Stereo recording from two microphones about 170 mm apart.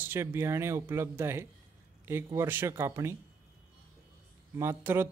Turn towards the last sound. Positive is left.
turn(degrees=-15)  # may be behind; listen again after turning